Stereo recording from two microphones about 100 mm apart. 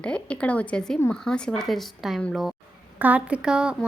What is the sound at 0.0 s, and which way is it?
A woman's voice, 10° left (ahead or behind).